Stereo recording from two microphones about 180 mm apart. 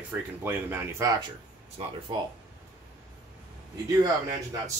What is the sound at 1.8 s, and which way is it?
Speech, 35° right (ahead or behind).